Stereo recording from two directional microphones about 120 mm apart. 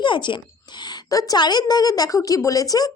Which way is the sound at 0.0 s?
40° left (ahead or behind).